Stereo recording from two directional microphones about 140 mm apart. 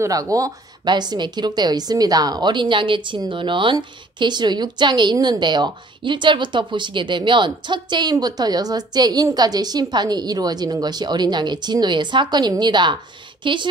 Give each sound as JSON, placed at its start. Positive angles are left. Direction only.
{"t": 0.0, "sound": "a woman's voice", "side_deg": -25}